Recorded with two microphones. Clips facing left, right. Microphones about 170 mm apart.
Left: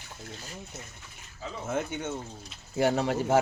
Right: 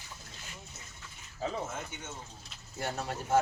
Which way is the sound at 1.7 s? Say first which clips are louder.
Left 11 dB; 60° left (ahead or behind).